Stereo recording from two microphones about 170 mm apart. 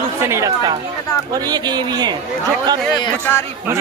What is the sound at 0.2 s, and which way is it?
Speech, 15° right (ahead or behind).